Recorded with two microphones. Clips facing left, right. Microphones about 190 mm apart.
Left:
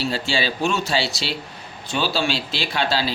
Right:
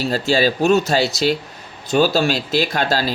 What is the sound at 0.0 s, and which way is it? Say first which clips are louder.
Speech: right 6 dB; 40° right (ahead or behind).